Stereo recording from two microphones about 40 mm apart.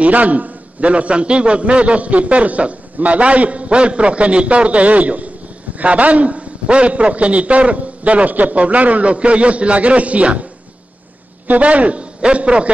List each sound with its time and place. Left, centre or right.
0.0 s a man's voice: right
11.4 s a man's voice: right